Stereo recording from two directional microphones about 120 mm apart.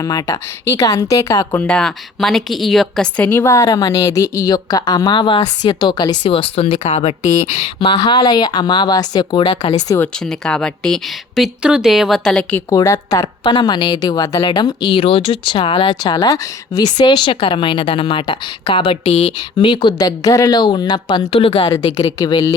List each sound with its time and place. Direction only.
0.0 s a woman's voice: 30° left (ahead or behind)
1.6 s a woman's voice: 10° left (ahead or behind); by 6.7 s 50° left (ahead or behind)
6.7 s speech: 75° left (ahead or behind); by 7.9 s 55° left (ahead or behind)
7.9 s a woman's voice: 40° left (ahead or behind)
9.5 s speech: 65° left (ahead or behind)
10.2 s speech: 5° left (ahead or behind)
12.7 s a woman's voice: 30° left (ahead or behind)
21.2 s a woman's voice: 50° left (ahead or behind)
21.8 s a woman's voice: 35° left (ahead or behind)